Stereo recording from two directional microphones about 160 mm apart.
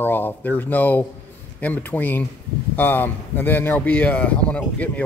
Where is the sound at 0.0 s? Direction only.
10° left (ahead or behind).